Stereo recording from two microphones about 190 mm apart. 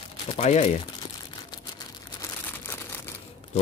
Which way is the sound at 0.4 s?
35° left (ahead or behind).